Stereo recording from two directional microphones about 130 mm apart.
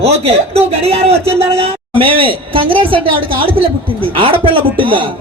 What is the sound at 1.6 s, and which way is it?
A man's voice, 45° right (ahead or behind).